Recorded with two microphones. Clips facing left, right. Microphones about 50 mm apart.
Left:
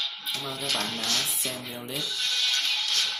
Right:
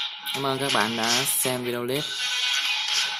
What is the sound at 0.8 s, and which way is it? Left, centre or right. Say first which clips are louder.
Speech: right 6 dB; right.